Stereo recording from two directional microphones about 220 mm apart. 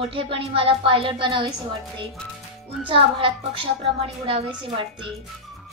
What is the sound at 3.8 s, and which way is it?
A woman's voice, 25° right (ahead or behind).